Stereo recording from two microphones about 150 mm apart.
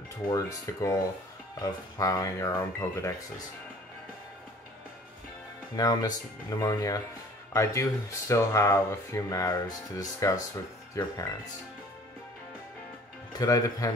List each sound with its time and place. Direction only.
0.3 s speech: 20° left (ahead or behind)
5.8 s speech: 25° left (ahead or behind)
13.3 s speech: 25° left (ahead or behind)